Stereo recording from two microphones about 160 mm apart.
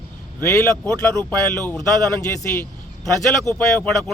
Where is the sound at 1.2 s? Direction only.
10° left (ahead or behind).